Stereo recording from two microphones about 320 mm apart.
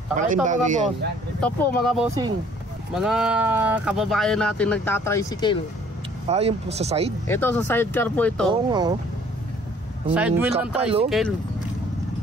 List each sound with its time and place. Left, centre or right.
0.1 s speech: right
1.4 s speech: centre
6.2 s speech: centre
7.2 s speech: centre
8.5 s speech: centre
10.1 s speech: centre